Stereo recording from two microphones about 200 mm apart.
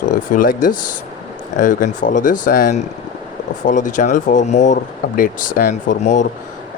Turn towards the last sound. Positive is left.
turn(degrees=35)  # may be behind; listen again after turning